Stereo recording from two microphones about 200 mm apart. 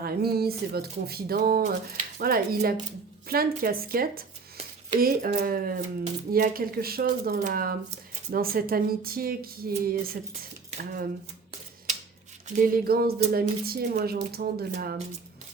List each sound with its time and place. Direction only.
0.0 s speech: 50° right (ahead or behind)
12.5 s speech: 45° right (ahead or behind)